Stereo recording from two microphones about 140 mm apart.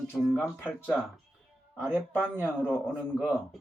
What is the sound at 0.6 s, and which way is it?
Speech, 15° left (ahead or behind).